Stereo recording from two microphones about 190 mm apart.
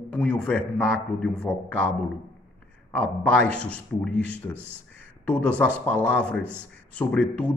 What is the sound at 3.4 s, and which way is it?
A man's voice, 5° left (ahead or behind).